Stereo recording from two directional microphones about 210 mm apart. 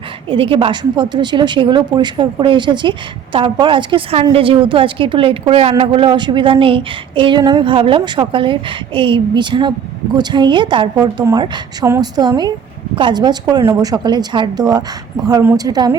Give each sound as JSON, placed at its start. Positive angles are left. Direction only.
{"t": 0.3, "sound": "a woman's voice", "side_deg": -25}